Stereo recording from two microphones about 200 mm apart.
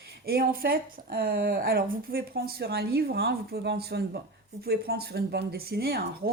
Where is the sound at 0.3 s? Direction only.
50° right (ahead or behind).